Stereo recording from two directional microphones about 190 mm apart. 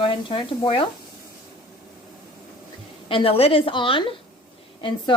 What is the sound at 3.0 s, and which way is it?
A woman's voice, 30° left (ahead or behind).